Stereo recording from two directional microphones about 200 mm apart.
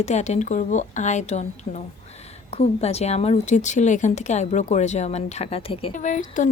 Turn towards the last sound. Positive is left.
turn(degrees=40)  # may be behind; listen again after turning